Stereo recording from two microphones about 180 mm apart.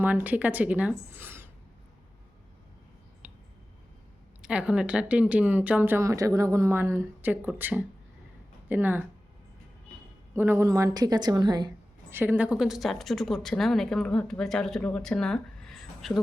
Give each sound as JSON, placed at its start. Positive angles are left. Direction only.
{"t": 0.0, "sound": "speech", "side_deg": -10}
{"t": 4.4, "sound": "speech", "side_deg": -5}
{"t": 10.3, "sound": "a woman's voice", "side_deg": -15}
{"t": 12.1, "sound": "speech", "side_deg": -10}